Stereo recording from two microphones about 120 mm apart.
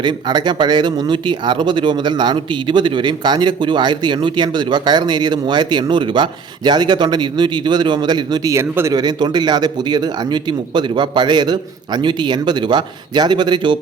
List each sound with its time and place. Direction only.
0.0 s speech: 40° right (ahead or behind)
8.5 s speech: 25° right (ahead or behind)
9.0 s speech: 35° right (ahead or behind)